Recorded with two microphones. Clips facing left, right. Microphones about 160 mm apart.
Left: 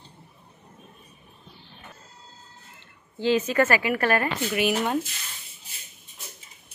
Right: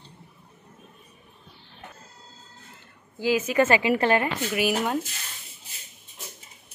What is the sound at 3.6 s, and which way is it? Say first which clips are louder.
Speech: right 2 dB; 20° right (ahead or behind).